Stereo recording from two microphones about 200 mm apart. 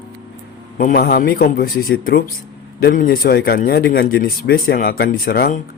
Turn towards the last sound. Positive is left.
turn(degrees=50)  # may be behind; listen again after turning